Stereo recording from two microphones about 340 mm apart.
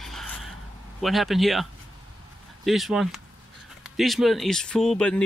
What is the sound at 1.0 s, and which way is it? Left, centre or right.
Speech, centre.